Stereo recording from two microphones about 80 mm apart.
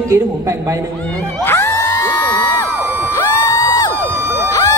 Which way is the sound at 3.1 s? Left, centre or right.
Left.